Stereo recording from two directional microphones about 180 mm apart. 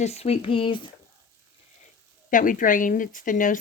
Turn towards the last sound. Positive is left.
turn(degrees=45)  # may be behind; listen again after turning